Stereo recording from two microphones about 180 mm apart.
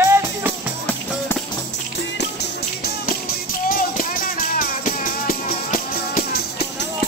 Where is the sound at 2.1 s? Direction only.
65° left (ahead or behind).